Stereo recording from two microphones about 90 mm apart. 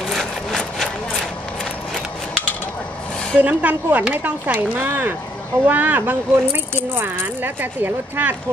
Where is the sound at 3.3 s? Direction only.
15° right (ahead or behind).